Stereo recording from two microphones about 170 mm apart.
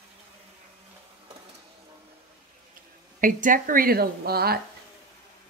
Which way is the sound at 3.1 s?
50° right (ahead or behind).